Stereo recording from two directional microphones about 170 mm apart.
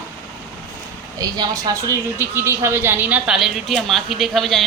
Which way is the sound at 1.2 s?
20° right (ahead or behind).